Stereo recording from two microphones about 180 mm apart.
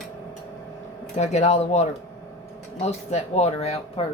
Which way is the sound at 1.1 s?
40° left (ahead or behind).